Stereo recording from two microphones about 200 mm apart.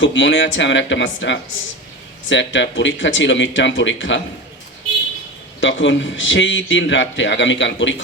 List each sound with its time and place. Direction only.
0.0 s a man's voice: 65° left (ahead or behind)
5.5 s a man's voice: 65° left (ahead or behind)